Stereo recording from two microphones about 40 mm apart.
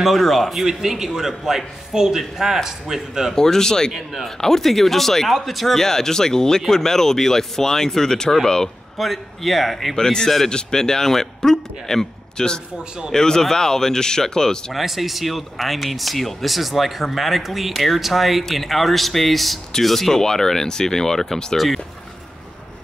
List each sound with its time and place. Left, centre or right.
0.0 s speech: centre
0.7 s a man's voice: centre
3.3 s a man's voice: centre
8.9 s speech: centre
9.9 s a man's voice: centre
14.7 s a man's voice: centre
21.5 s speech: centre